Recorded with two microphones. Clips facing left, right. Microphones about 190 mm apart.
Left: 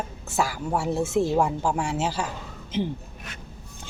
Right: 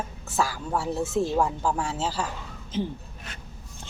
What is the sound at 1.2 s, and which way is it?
Speech, 10° left (ahead or behind).